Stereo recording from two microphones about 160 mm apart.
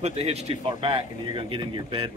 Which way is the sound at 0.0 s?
40° right (ahead or behind).